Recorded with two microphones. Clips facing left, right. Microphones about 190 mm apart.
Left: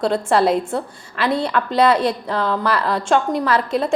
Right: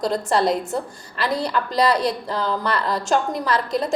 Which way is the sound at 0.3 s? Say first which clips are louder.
Left 3 dB; centre (ahead or behind).